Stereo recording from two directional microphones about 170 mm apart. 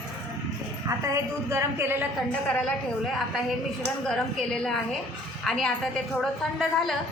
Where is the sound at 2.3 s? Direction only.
5° left (ahead or behind).